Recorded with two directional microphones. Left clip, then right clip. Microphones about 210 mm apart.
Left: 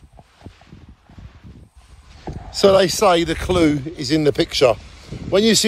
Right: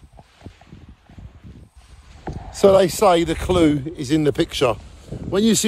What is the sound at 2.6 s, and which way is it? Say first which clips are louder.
A man's voice: even; 40° right (ahead or behind).